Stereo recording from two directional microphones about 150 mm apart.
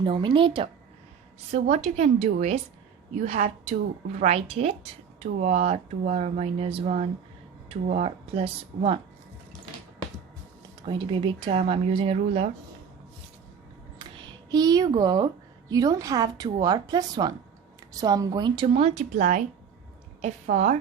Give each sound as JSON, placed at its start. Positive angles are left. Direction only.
{"t": 0.0, "sound": "speech", "side_deg": -35}
{"t": 1.7, "sound": "speech", "side_deg": -50}
{"t": 10.8, "sound": "speech", "side_deg": -35}
{"t": 14.5, "sound": "a woman's voice", "side_deg": -25}